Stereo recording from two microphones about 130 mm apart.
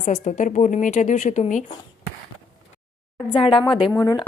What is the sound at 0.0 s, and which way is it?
A woman's voice, 65° left (ahead or behind).